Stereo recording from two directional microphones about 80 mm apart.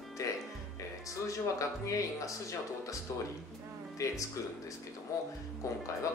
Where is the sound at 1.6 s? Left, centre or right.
Left.